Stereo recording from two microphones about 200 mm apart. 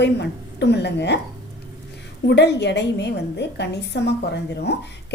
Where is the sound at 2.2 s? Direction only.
60° left (ahead or behind).